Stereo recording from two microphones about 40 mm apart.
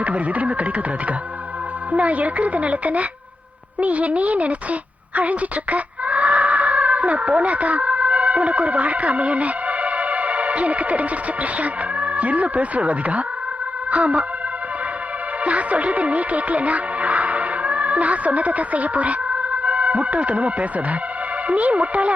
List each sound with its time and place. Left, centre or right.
0.0 s a woman's voice: right
15.4 s music: right
21.4 s speech: right